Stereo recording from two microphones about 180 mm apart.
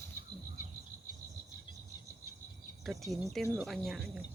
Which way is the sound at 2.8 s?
Centre (ahead or behind).